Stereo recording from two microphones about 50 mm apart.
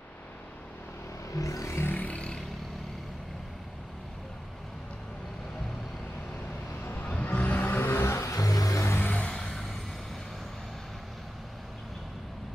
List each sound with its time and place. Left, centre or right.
1.3 s vehicle: left
2.0 s a sound: left
6.8 s vehicle: left
7.1 s vehicle: left
7.6 s music: left
8.2 s music: left
9.0 s vehicle: left
9.3 s vehicle: centre